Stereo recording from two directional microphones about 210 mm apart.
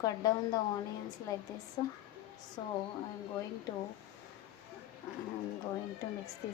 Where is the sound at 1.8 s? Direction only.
20° left (ahead or behind).